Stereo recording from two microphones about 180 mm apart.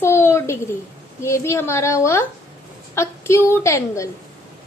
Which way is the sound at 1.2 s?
15° left (ahead or behind).